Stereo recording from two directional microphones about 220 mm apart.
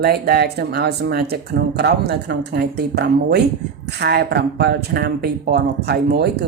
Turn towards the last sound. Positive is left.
turn(degrees=-50)  # may be behind; listen again after turning